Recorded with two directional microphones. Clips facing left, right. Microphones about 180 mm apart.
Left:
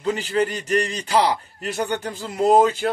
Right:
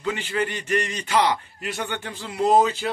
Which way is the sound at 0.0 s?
35° left (ahead or behind).